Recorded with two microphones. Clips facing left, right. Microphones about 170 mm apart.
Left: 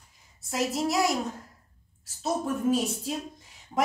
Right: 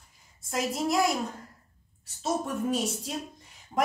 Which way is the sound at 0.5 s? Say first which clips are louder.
Left 1 dB; centre (ahead or behind).